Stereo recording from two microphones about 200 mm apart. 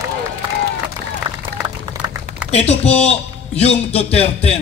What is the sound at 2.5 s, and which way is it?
A man's voice, 30° left (ahead or behind).